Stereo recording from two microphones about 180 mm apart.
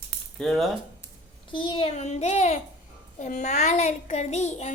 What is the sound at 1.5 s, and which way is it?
Speech, 25° left (ahead or behind).